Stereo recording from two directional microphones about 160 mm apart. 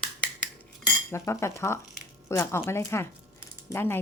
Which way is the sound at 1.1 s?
15° left (ahead or behind).